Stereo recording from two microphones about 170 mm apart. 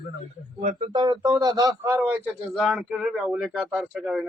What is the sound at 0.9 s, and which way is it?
A man's voice, 25° right (ahead or behind).